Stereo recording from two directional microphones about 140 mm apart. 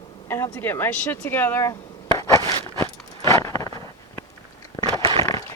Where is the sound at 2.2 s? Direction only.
25° left (ahead or behind).